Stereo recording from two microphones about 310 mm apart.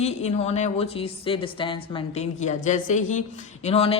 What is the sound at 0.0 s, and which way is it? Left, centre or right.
Speech, left.